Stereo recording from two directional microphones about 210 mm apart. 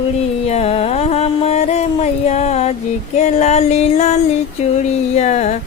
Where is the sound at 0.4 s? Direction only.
30° left (ahead or behind).